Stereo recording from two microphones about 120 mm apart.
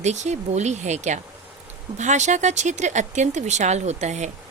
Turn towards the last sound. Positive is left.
turn(degrees=-75)  # may be behind; listen again after turning